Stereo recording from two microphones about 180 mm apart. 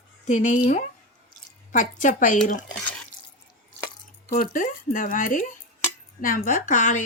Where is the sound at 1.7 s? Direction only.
45° left (ahead or behind).